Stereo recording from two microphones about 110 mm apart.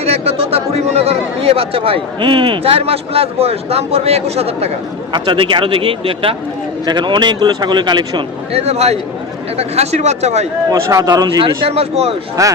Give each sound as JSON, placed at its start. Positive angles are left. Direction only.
{"t": 0.0, "sound": "speech", "side_deg": -65}
{"t": 5.1, "sound": "speech", "side_deg": -50}
{"t": 6.8, "sound": "a man's voice", "side_deg": -45}
{"t": 8.5, "sound": "speech", "side_deg": -75}
{"t": 10.7, "sound": "a man's voice", "side_deg": -30}
{"t": 11.4, "sound": "speech", "side_deg": -65}
{"t": 12.4, "sound": "a man's voice", "side_deg": -30}